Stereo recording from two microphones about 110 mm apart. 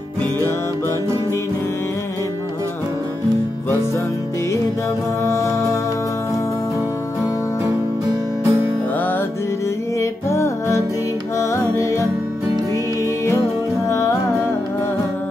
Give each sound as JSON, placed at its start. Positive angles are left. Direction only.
{"t": 5.2, "sound": "music", "side_deg": 30}
{"t": 7.6, "sound": "music", "side_deg": -30}
{"t": 9.9, "sound": "music", "side_deg": 25}
{"t": 13.8, "sound": "music", "side_deg": 30}